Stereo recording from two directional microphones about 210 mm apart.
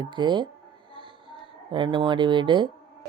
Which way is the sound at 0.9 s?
25° right (ahead or behind).